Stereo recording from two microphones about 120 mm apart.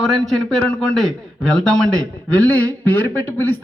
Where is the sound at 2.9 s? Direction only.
15° left (ahead or behind).